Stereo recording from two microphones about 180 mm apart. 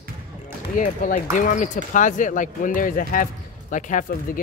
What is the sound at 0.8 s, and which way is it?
Speech, 45° left (ahead or behind).